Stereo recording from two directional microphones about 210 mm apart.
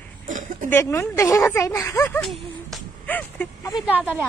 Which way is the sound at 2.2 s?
Centre (ahead or behind).